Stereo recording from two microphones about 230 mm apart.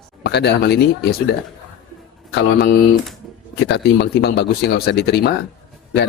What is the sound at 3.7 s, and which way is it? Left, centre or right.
Speech, left.